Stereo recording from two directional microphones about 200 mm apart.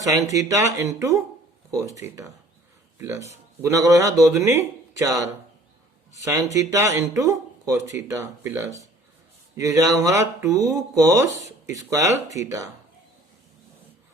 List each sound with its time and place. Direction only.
0.0 s speech: 15° right (ahead or behind)
6.2 s speech: 15° right (ahead or behind)